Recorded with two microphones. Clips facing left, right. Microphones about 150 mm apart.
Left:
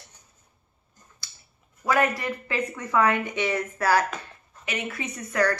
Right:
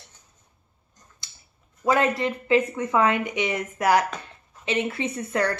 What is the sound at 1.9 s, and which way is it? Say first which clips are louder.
Speech: right 2 dB; 25° right (ahead or behind).